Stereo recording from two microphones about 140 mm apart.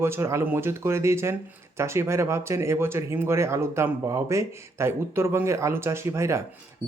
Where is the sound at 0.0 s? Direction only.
20° right (ahead or behind).